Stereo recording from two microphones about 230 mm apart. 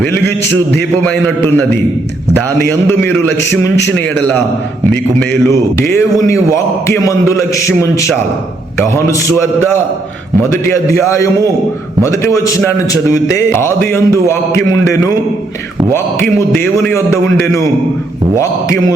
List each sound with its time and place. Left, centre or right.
0.0 s a man's voice: centre
5.9 s a man's voice: centre
10.5 s a man's voice: centre
15.9 s a man's voice: centre
18.3 s a man's voice: centre